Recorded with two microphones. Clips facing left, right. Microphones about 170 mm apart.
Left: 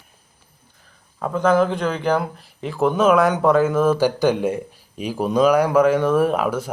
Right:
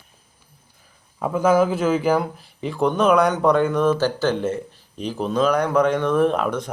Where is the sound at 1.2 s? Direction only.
10° right (ahead or behind).